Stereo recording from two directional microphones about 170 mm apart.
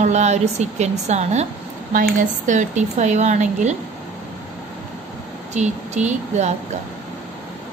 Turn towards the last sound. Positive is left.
turn(degrees=-40)  # may be behind; listen again after turning